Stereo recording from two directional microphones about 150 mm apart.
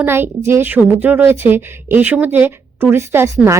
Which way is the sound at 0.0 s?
15° right (ahead or behind).